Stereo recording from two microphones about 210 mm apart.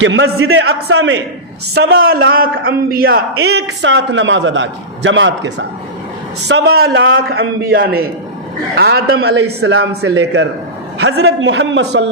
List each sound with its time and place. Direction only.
0.0 s a man's voice: 65° right (ahead or behind)
0.9 s a man's voice: 55° right (ahead or behind)
2.0 s a man's voice: 45° right (ahead or behind)